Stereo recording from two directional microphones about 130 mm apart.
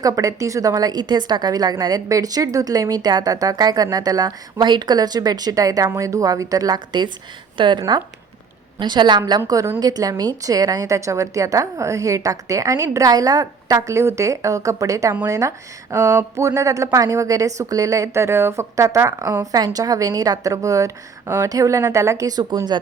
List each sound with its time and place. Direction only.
0.0 s a woman's voice: 25° right (ahead or behind)
9.5 s speech: 20° right (ahead or behind)